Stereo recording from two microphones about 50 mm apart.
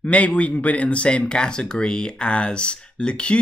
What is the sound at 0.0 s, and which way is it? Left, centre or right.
Speech, left.